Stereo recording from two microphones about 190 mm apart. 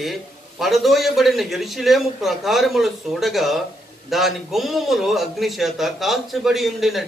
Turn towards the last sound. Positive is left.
turn(degrees=0)  # may be behind; listen again after turning